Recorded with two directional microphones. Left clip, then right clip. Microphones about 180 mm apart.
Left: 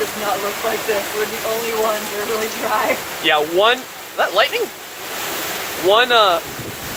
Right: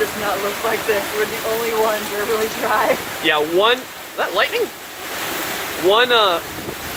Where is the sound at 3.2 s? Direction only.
5° left (ahead or behind).